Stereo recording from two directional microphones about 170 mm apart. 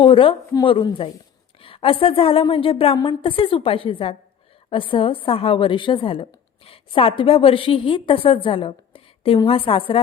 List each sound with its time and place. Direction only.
0.0 s a woman's voice: 30° left (ahead or behind)